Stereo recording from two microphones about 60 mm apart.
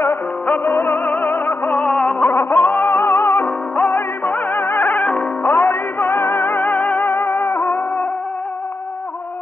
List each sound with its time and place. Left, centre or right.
0.7 s music: left
1.8 s music: centre
5.4 s music: left